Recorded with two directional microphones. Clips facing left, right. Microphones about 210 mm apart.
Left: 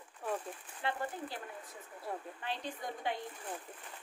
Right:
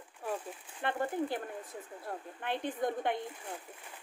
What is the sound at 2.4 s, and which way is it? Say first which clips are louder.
Speech: right 11 dB; 55° right (ahead or behind).